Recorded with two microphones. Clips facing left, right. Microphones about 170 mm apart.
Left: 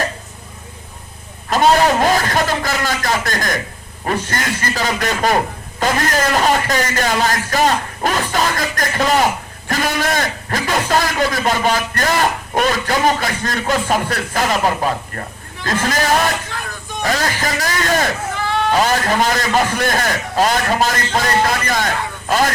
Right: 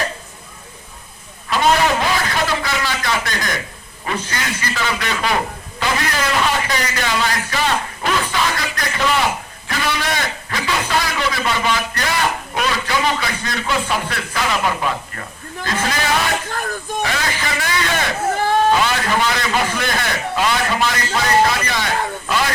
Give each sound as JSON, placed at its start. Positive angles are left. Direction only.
{"t": 1.5, "sound": "a sound", "side_deg": 40}
{"t": 4.0, "sound": "speech", "side_deg": 45}
{"t": 16.5, "sound": "vehicle", "side_deg": -45}
{"t": 17.0, "sound": "a man's voice", "side_deg": 40}
{"t": 18.3, "sound": "a sound", "side_deg": -45}
{"t": 18.8, "sound": "speech", "side_deg": 45}